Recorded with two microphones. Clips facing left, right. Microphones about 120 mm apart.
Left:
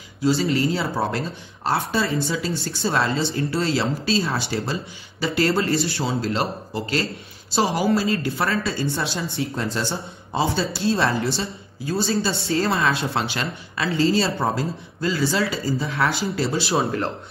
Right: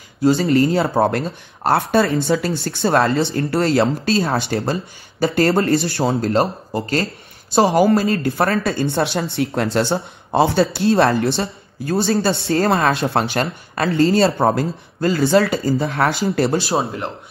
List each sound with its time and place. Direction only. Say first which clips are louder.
0.5 s speech: right 6 dB; 50° right (ahead or behind)